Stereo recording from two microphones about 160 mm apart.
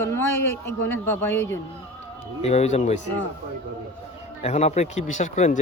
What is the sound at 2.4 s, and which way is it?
Speech, 45° left (ahead or behind).